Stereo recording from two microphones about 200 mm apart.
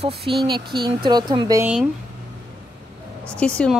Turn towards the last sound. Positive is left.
turn(degrees=5)  # may be behind; listen again after turning